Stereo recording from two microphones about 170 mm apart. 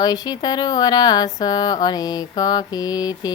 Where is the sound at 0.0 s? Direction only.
25° left (ahead or behind).